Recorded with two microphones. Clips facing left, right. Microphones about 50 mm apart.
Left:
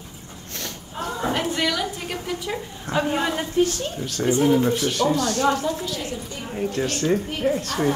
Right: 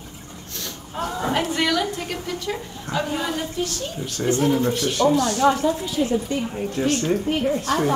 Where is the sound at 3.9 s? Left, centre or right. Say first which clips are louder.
Even; centre.